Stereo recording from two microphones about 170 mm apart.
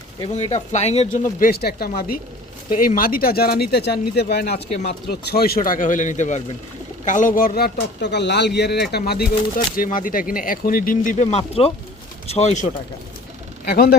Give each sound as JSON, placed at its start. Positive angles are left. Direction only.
{"t": 0.3, "sound": "speech", "side_deg": 40}
{"t": 9.7, "sound": "speech", "side_deg": 55}
{"t": 13.7, "sound": "speech", "side_deg": 65}